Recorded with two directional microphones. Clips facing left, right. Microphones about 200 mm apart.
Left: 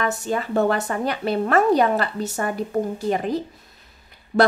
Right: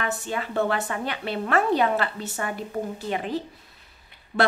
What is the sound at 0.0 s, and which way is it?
A woman's voice, 40° left (ahead or behind).